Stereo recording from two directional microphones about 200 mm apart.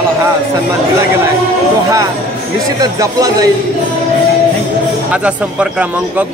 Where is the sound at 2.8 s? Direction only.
20° right (ahead or behind).